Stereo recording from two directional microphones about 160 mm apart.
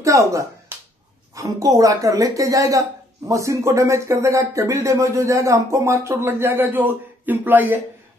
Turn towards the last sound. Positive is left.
turn(degrees=-10)  # may be behind; listen again after turning